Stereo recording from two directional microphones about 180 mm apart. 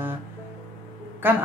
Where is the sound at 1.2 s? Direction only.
10° right (ahead or behind).